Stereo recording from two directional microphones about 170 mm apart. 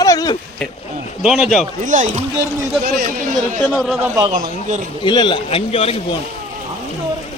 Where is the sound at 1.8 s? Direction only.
50° right (ahead or behind).